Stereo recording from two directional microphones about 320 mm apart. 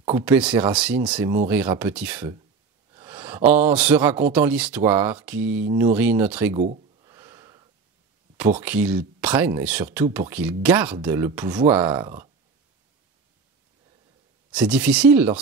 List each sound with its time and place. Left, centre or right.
0.0 s speech: centre
6.6 s a sound: right
7.1 s snort: centre
8.4 s speech: centre
14.5 s speech: centre